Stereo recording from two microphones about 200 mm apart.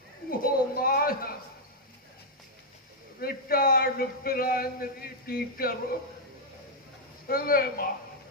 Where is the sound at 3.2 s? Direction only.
50° left (ahead or behind).